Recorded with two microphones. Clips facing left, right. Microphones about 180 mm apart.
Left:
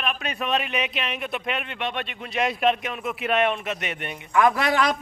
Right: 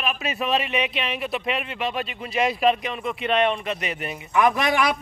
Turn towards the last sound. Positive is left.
turn(degrees=-15)  # may be behind; listen again after turning